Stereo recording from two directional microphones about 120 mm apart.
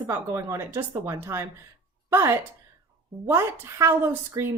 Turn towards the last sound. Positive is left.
turn(degrees=-25)  # may be behind; listen again after turning